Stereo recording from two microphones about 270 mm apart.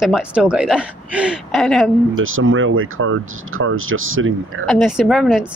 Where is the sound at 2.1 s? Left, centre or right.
Right.